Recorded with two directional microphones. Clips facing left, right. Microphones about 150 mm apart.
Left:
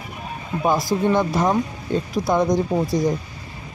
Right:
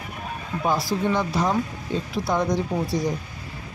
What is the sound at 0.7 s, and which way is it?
Speech, 50° left (ahead or behind).